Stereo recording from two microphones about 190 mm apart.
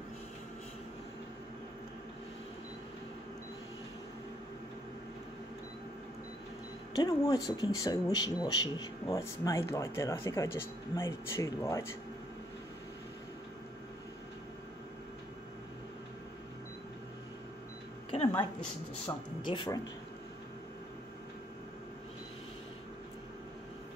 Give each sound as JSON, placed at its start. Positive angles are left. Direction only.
{"t": 7.0, "sound": "speech", "side_deg": 20}
{"t": 19.0, "sound": "speech", "side_deg": 25}